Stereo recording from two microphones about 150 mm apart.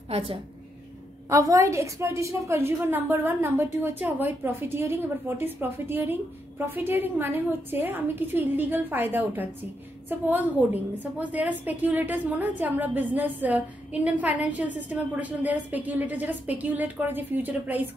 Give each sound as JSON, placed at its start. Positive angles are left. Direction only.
{"t": 0.1, "sound": "a woman's voice", "side_deg": -35}
{"t": 1.3, "sound": "a woman's voice", "side_deg": -20}